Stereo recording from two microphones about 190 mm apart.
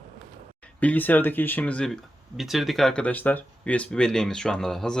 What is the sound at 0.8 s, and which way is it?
Speech, 10° left (ahead or behind).